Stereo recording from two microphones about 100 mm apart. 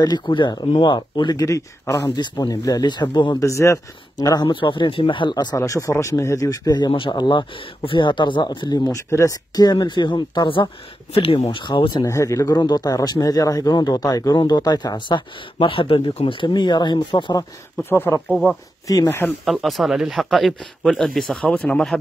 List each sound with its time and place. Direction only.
0.0 s a man's voice: 45° left (ahead or behind)
2.0 s a man's voice: 50° left (ahead or behind)
3.3 s a man's voice: 30° left (ahead or behind)
5.6 s a man's voice: 30° left (ahead or behind); by 8.6 s 50° left (ahead or behind)
8.6 s a man's voice: 40° left (ahead or behind)
12.0 s a man's voice: 30° left (ahead or behind); by 17.3 s 50° left (ahead or behind)
17.8 s speech: 20° left (ahead or behind)
18.3 s speech: centre (ahead or behind)
19.0 s speech: 25° left (ahead or behind)
19.4 s speech: centre (ahead or behind)